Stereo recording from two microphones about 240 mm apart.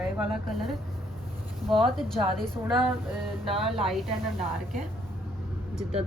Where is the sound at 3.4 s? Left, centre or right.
Right.